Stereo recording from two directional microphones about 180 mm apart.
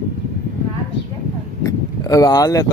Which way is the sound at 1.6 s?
20° left (ahead or behind).